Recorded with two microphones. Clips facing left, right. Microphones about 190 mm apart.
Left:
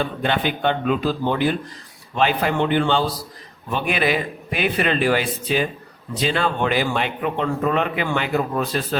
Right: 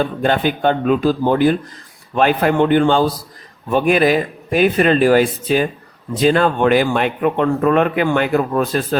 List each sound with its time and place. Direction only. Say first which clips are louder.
0.0 s a man's voice: right 5 dB; 45° right (ahead or behind)